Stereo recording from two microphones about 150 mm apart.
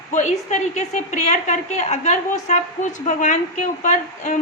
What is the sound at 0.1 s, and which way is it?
A woman's voice, 55° left (ahead or behind).